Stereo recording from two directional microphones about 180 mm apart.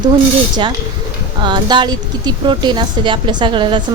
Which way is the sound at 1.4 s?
25° right (ahead or behind).